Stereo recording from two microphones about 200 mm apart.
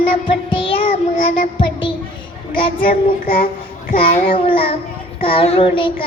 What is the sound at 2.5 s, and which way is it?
Speech, 25° left (ahead or behind).